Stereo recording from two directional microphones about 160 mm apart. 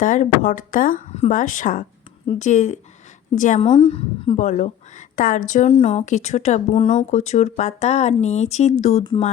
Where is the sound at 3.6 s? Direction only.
35° left (ahead or behind).